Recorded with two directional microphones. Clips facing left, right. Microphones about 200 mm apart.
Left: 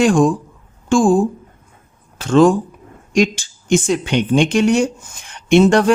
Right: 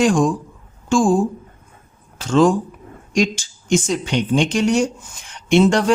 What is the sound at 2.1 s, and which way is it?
Speech, 55° left (ahead or behind).